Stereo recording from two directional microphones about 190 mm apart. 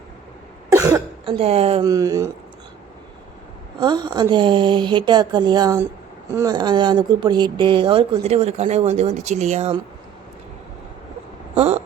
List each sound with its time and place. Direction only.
0.7 s cough: 15° right (ahead or behind)
1.2 s a woman's voice: 30° right (ahead or behind)
1.8 s speech: 20° right (ahead or behind)
3.8 s speech: 20° right (ahead or behind)
11.5 s a sound: 35° right (ahead or behind)